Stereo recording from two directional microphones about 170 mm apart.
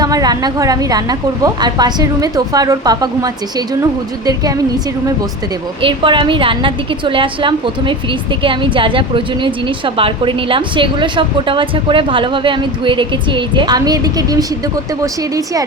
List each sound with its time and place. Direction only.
0.0 s a woman's voice: 20° right (ahead or behind)
5.8 s a woman's voice: 30° right (ahead or behind)